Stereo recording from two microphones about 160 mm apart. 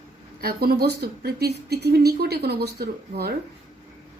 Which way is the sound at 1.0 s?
90° right.